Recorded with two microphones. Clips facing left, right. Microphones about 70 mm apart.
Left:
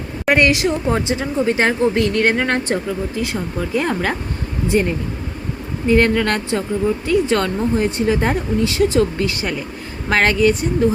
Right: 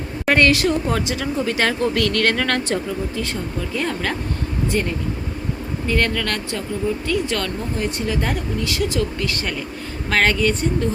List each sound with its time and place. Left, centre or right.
0.3 s speech: centre